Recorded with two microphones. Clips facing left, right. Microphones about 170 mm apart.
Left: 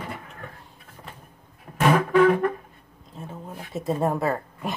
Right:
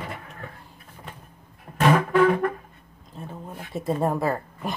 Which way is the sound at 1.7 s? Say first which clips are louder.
Even; centre (ahead or behind).